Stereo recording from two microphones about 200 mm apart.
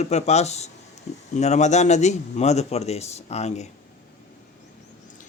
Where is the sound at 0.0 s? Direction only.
35° left (ahead or behind).